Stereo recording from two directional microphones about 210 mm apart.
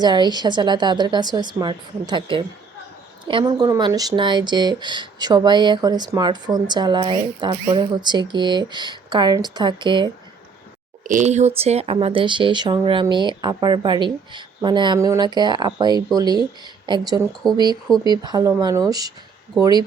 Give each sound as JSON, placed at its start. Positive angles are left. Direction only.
{"t": 0.0, "sound": "speech", "side_deg": -20}
{"t": 11.0, "sound": "speech", "side_deg": -35}